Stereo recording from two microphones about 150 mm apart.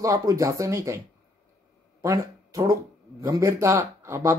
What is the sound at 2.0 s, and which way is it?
Speech, 20° right (ahead or behind).